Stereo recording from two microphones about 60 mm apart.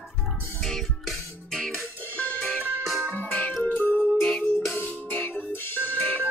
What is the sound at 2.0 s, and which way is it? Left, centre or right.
Music, left.